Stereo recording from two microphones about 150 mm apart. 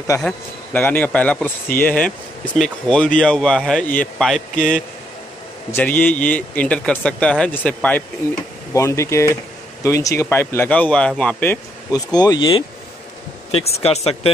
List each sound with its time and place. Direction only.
0.7 s speech: 10° left (ahead or behind)
11.9 s speech: 25° left (ahead or behind)
13.5 s speech: 45° left (ahead or behind)